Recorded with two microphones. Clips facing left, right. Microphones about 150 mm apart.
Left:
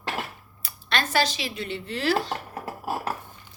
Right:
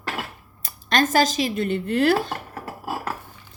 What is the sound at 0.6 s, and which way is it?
Speech, 45° right (ahead or behind).